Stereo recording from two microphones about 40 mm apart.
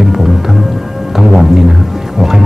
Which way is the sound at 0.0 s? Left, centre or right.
Centre.